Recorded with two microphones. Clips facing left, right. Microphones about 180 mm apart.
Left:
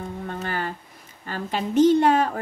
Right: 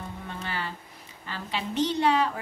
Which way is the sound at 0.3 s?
50° left (ahead or behind).